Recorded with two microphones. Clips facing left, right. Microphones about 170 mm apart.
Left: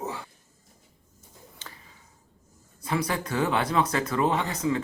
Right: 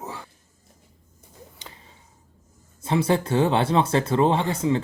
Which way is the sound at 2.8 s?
25° right (ahead or behind).